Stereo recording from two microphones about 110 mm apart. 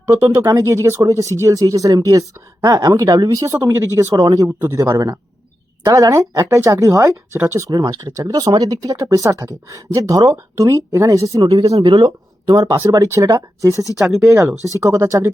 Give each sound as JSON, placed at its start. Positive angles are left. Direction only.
{"t": 0.3, "sound": "speech", "side_deg": -35}
{"t": 4.9, "sound": "speech", "side_deg": -35}
{"t": 11.8, "sound": "speech", "side_deg": -50}
{"t": 12.5, "sound": "speech", "side_deg": -30}